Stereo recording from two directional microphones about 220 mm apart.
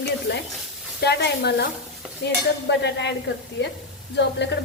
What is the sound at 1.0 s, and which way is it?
A woman's voice, 50° left (ahead or behind).